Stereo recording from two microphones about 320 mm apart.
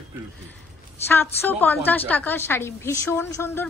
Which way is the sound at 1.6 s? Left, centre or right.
Centre.